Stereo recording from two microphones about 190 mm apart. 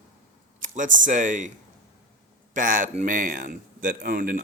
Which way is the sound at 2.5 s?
45° right (ahead or behind).